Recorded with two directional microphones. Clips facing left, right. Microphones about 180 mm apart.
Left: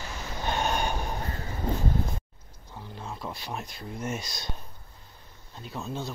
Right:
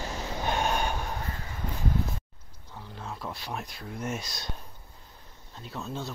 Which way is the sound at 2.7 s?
5° left (ahead or behind).